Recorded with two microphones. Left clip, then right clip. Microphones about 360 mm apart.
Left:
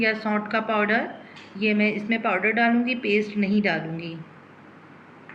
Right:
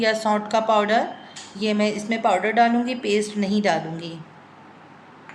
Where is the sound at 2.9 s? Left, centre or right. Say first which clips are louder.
Even; right.